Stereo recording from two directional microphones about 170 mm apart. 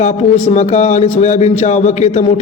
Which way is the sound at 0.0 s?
40° left (ahead or behind).